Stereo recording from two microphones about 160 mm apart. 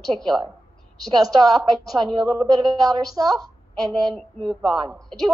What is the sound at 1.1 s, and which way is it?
Speech, 25° right (ahead or behind).